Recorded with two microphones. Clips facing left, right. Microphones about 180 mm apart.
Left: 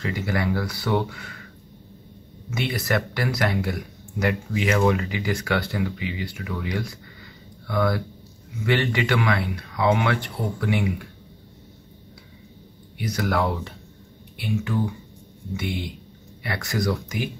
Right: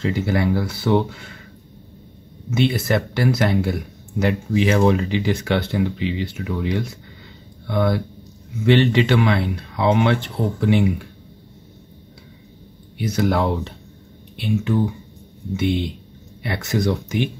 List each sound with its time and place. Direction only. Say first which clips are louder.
0.0 s speech: right 5 dB; 25° right (ahead or behind)
2.5 s speech: right 6 dB; 25° right (ahead or behind)
12.9 s speech: right 5 dB; 25° right (ahead or behind)